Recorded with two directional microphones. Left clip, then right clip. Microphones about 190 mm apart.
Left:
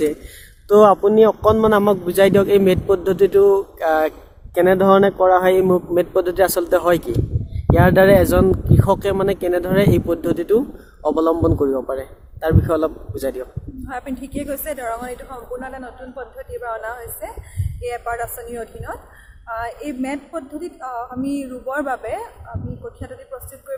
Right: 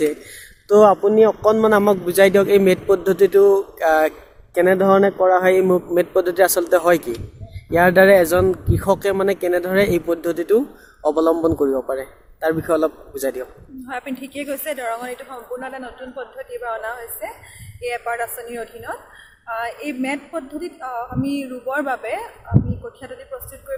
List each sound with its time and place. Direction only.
0.7 s a man's voice: 15° left (ahead or behind)
4.5 s a man's voice: 15° left (ahead or behind)